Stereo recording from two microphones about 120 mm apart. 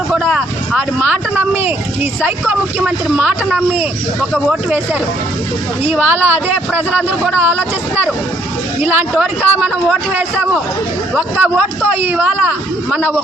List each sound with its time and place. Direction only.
0.1 s speech: 10° right (ahead or behind)
5.8 s speech: 15° right (ahead or behind)